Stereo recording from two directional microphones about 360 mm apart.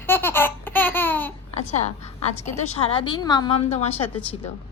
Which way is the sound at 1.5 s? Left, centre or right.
Centre.